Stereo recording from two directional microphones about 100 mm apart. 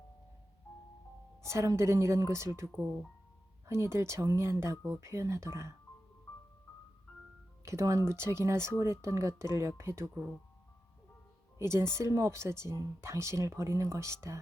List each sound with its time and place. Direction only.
0.7 s music: 30° left (ahead or behind)
1.5 s speech: 30° right (ahead or behind)
3.7 s speech: 30° right (ahead or behind)
7.6 s speech: 30° right (ahead or behind)
11.6 s speech: 25° right (ahead or behind)